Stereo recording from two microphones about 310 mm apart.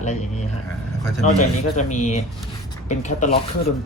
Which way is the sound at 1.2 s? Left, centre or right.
Left.